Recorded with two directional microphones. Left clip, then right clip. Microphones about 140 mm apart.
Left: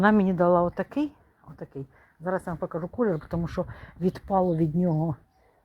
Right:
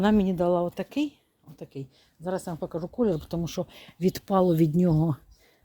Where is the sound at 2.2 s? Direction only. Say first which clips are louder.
Left 2 dB; 15° right (ahead or behind).